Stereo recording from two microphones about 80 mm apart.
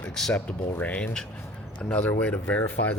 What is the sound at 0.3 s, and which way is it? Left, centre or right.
Speech, centre.